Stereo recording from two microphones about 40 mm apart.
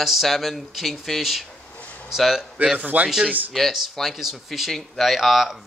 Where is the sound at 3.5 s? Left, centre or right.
Centre.